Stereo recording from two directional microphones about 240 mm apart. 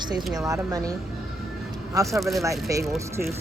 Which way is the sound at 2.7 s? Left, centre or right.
Centre.